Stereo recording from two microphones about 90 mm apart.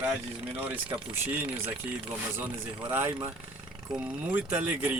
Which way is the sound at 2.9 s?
25° right (ahead or behind).